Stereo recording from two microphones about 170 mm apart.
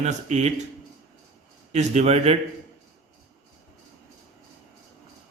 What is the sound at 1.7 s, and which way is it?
Speech, 40° right (ahead or behind).